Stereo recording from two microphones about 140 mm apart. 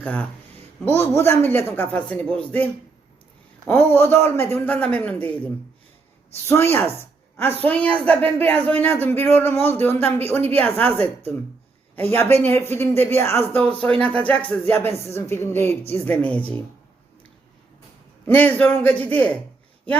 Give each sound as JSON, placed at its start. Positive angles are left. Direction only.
{"t": 0.0, "sound": "speech", "side_deg": 10}
{"t": 3.7, "sound": "speech", "side_deg": 15}
{"t": 6.5, "sound": "speech", "side_deg": 15}
{"t": 11.9, "sound": "speech", "side_deg": 15}
{"t": 18.3, "sound": "speech", "side_deg": 10}